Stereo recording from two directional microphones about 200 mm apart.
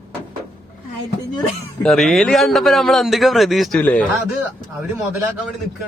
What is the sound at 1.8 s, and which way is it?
A man's voice, centre (ahead or behind).